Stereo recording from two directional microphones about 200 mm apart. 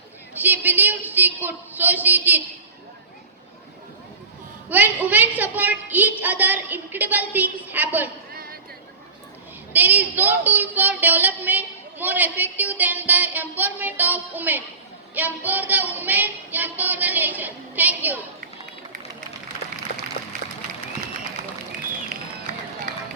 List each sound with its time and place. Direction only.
0.3 s speech: 10° right (ahead or behind)
4.7 s speech: 10° right (ahead or behind)
8.3 s a sound: 50° right (ahead or behind)
9.7 s speech: 10° right (ahead or behind)